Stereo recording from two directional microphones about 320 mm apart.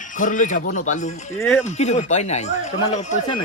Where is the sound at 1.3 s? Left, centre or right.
Centre.